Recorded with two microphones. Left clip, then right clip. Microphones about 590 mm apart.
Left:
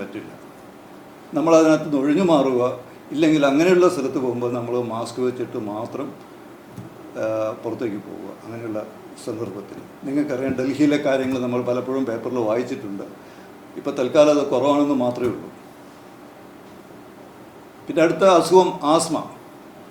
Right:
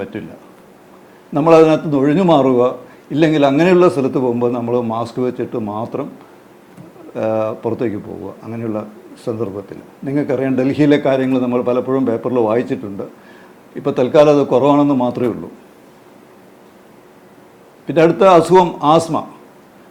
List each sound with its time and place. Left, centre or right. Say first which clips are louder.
1.3 s a man's voice: right 6 dB; right
7.2 s a man's voice: right 6 dB; right
9.3 s a man's voice: right 7 dB; right
13.8 s a man's voice: right 5 dB; right
17.8 s a man's voice: right 5 dB; right